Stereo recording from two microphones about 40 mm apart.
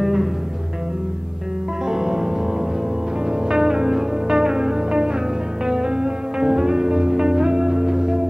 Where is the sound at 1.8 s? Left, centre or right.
Centre.